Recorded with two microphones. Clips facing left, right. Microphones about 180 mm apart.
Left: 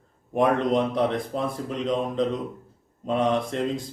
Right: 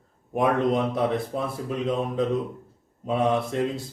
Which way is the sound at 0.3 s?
5° right (ahead or behind).